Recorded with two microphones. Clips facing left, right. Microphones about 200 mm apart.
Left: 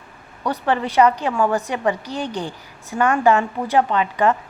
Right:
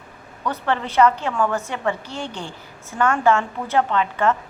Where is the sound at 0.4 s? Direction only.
15° left (ahead or behind).